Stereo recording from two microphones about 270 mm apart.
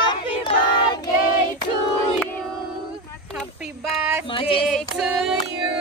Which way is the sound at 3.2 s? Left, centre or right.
Centre.